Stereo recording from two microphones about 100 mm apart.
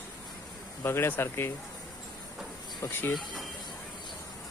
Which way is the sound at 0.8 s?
25° left (ahead or behind).